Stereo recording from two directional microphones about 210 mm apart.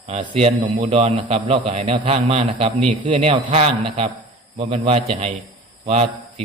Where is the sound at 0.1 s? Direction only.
30° right (ahead or behind).